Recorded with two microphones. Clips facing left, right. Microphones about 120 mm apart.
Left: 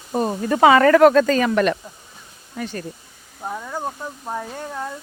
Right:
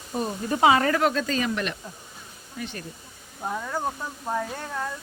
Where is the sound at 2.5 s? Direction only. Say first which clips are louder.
Left 6 dB; 45° left (ahead or behind).